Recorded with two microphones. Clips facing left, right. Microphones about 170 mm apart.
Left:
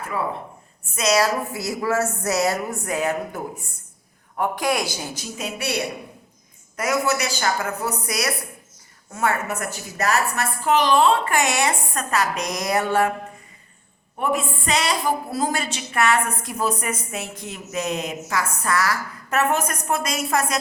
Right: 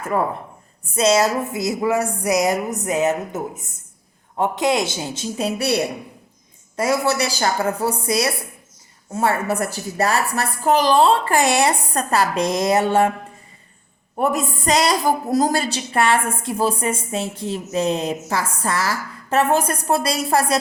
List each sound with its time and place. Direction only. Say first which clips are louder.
0.1 s speech: right 6 dB; 45° right (ahead or behind)
0.9 s a woman's voice: right 3 dB; 25° right (ahead or behind)
14.2 s a woman's voice: right 3 dB; 40° right (ahead or behind)